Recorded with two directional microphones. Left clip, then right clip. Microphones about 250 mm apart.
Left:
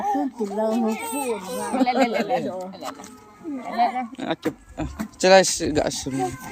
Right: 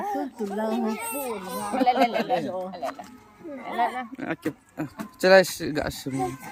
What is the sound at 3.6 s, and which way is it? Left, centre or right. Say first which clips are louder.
Speech: left 4 dB; centre.